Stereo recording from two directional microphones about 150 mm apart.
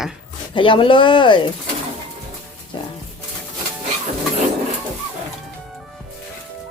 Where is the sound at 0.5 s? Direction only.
35° left (ahead or behind).